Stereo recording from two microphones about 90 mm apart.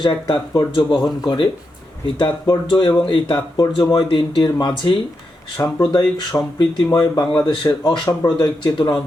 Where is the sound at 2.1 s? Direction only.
60° left (ahead or behind).